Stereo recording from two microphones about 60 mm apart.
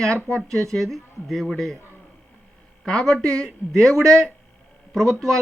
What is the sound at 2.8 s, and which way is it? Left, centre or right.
Speech, centre.